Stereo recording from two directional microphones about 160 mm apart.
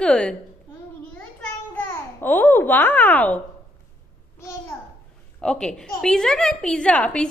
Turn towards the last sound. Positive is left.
turn(degrees=10)  # may be behind; listen again after turning